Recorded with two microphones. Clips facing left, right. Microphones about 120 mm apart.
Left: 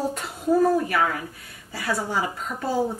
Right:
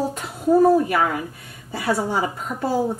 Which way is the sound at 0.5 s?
20° right (ahead or behind).